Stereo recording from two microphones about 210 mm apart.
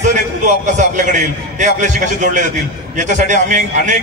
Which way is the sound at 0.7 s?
35° right (ahead or behind).